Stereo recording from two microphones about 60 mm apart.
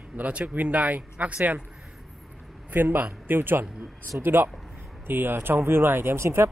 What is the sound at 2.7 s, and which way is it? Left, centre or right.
Speech, right.